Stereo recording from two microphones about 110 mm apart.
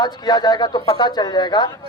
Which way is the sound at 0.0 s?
40° left (ahead or behind).